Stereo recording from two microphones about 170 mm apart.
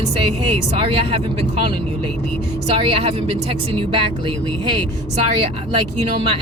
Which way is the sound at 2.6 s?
35° right (ahead or behind).